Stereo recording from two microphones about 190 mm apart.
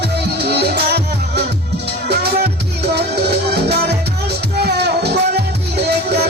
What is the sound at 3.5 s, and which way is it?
Music, 60° right (ahead or behind).